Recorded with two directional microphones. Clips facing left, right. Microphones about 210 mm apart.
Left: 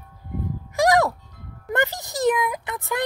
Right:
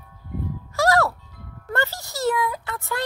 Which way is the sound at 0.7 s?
15° left (ahead or behind).